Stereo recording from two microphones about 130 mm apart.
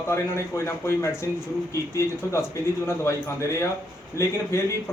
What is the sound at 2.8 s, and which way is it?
A man's voice, 25° left (ahead or behind).